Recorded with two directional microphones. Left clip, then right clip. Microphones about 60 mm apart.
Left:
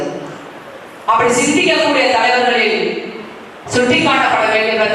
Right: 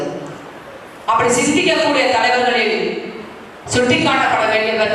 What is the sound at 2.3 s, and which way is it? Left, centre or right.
Speech, left.